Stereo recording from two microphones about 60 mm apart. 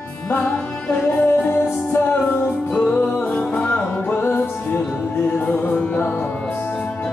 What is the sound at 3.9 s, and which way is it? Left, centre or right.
Music, left.